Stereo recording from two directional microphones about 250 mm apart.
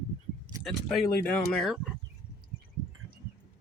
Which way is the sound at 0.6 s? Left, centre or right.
Centre.